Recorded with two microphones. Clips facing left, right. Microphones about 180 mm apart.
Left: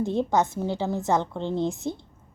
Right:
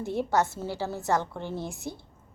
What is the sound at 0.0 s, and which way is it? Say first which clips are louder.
A woman's voice: left 3 dB; 20° left (ahead or behind).